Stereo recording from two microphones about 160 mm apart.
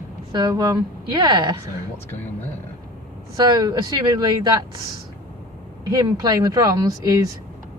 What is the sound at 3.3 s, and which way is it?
A woman's voice, 25° right (ahead or behind).